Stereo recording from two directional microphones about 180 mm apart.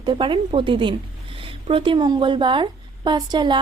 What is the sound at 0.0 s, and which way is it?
A woman's voice, 25° right (ahead or behind).